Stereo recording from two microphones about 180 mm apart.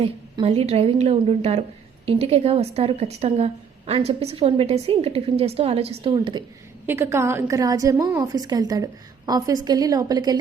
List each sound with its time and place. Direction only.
0.0 s a woman's voice: 30° right (ahead or behind)
6.8 s a woman's voice: 15° right (ahead or behind)